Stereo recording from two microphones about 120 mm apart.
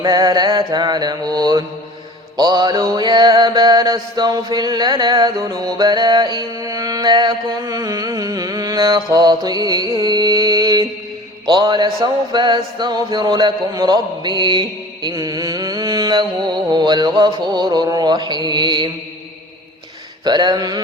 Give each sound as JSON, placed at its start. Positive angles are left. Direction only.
{"t": 0.0, "sound": "music", "side_deg": -30}
{"t": 20.2, "sound": "music", "side_deg": -35}